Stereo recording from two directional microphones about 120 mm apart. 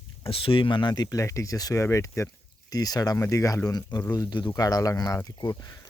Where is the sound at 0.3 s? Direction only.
50° left (ahead or behind).